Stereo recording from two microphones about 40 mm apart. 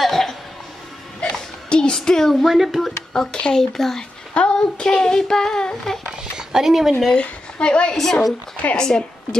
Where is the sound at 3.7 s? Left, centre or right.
Centre.